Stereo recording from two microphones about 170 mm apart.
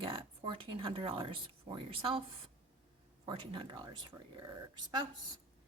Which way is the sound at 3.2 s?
30° right (ahead or behind).